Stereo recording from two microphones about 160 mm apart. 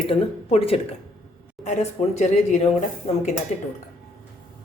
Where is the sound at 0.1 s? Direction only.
40° left (ahead or behind).